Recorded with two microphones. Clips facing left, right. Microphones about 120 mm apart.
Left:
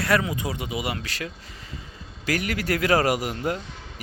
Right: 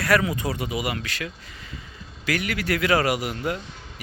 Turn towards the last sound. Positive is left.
turn(degrees=40)  # may be behind; listen again after turning